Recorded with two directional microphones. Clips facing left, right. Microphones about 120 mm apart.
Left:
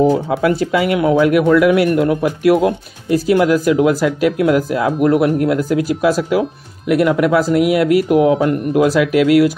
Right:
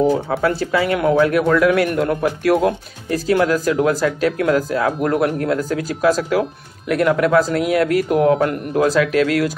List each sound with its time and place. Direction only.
0.5 s speech: 15° left (ahead or behind)